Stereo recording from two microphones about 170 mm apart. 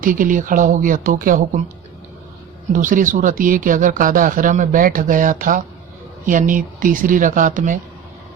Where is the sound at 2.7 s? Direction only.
50° right (ahead or behind).